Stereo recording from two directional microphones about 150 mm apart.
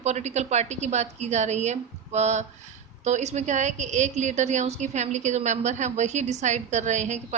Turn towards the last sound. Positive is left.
turn(degrees=-50)  # may be behind; listen again after turning